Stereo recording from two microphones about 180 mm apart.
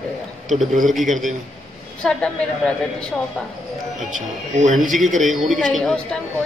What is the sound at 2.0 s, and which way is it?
Speech, 5° left (ahead or behind).